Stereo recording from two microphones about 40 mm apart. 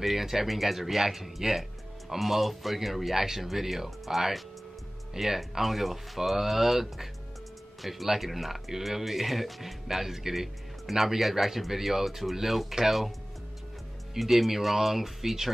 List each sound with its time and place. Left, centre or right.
0.0 s speech: centre
14.1 s speech: centre